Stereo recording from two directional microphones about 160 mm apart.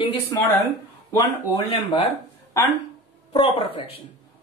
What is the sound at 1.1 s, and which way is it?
Speech, 30° left (ahead or behind).